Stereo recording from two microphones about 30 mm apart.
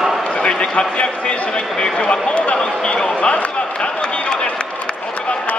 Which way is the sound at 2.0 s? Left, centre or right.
Left.